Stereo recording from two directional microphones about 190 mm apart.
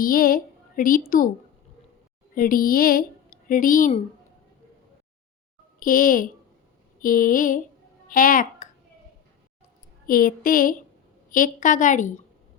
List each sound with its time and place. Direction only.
0.0 s a woman's voice: 50° left (ahead or behind)
2.3 s a woman's voice: 45° left (ahead or behind)
5.8 s a woman's voice: 45° left (ahead or behind)
8.0 s a sound: 45° left (ahead or behind)
10.1 s a woman's voice: 50° left (ahead or behind)